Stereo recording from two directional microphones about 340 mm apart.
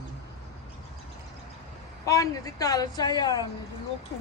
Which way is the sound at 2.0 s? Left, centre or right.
Centre.